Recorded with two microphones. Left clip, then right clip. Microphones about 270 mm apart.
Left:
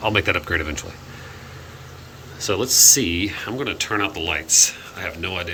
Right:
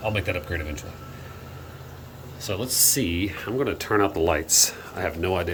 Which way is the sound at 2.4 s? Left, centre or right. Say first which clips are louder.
Left 9 dB; centre.